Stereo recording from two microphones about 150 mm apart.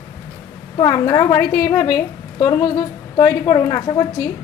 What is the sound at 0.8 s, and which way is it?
A woman's voice, 25° left (ahead or behind).